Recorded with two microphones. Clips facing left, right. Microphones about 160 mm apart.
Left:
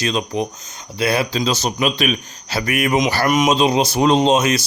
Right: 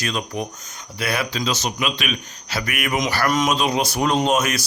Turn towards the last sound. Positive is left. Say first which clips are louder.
# left 4 dB
turn(degrees=25)  # may be behind; listen again after turning